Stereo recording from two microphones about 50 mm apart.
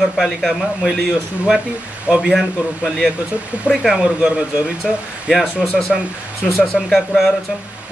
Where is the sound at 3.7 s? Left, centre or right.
Centre.